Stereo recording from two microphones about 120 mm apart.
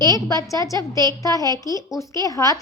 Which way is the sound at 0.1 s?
30° left (ahead or behind).